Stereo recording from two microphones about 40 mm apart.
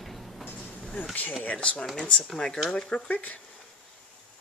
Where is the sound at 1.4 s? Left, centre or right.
Left; by 2.6 s centre.